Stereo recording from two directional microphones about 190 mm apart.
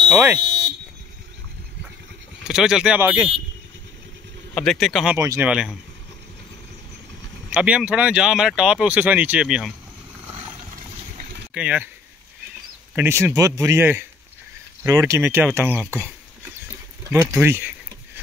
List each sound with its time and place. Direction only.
0.1 s speech: 10° right (ahead or behind)
0.4 s buzzer: 65° right (ahead or behind)
2.4 s speech: 5° right (ahead or behind)
4.6 s speech: centre (ahead or behind)
5.1 s speech: 15° right (ahead or behind)
7.5 s speech: 5° right (ahead or behind)
11.5 s speech: 5° right (ahead or behind)
12.9 s speech: 15° right (ahead or behind)
17.1 s speech: 10° right (ahead or behind)